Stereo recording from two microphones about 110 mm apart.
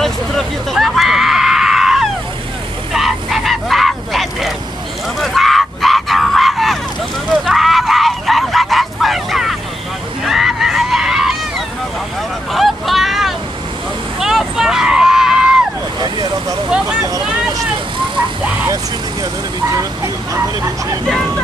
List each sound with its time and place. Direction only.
0.0 s a sound: 5° left (ahead or behind)
10.2 s screaming: centre (ahead or behind)
12.5 s a sound: centre (ahead or behind)
16.0 s vehicle: 40° right (ahead or behind)
18.1 s vehicle: 10° right (ahead or behind)
19.7 s vehicle: 30° right (ahead or behind)